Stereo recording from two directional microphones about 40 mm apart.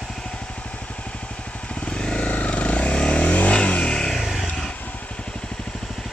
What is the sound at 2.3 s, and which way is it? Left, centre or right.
Vehicle, left.